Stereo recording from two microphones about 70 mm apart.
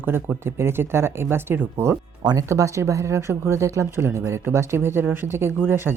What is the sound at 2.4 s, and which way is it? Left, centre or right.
Speech, right.